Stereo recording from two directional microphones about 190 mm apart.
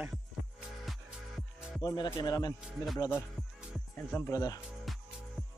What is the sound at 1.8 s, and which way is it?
Speech, 20° left (ahead or behind).